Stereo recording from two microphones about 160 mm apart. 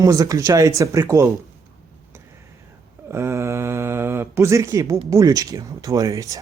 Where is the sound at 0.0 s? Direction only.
20° right (ahead or behind).